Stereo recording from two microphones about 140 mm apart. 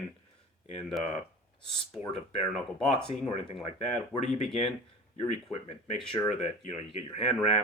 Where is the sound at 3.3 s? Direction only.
45° left (ahead or behind).